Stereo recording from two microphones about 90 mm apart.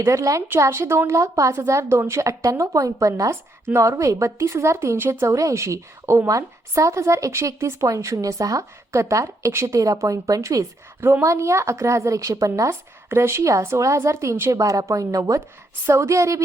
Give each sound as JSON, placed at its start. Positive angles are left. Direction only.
{"t": 0.0, "sound": "a woman's voice", "side_deg": -35}